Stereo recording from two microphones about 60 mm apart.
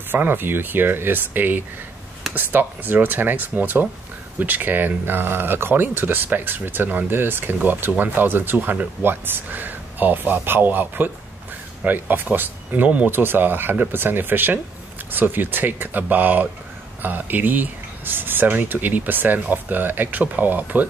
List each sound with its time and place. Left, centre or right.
0.1 s speech: right
8.5 s speech: right
9.0 s speech: right
13.1 s speech: right